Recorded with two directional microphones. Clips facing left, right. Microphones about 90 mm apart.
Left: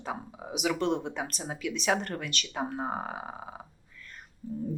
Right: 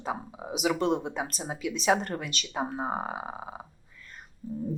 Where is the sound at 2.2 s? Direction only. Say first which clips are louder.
Right 1 dB; 20° right (ahead or behind).